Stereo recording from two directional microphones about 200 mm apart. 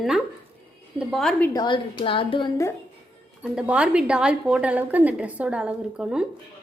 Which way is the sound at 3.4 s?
5° right (ahead or behind).